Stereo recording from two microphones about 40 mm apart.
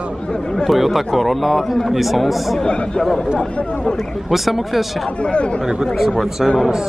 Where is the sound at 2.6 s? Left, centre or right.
Left.